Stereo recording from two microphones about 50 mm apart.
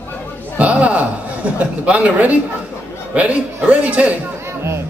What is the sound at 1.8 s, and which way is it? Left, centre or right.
A man's voice, right.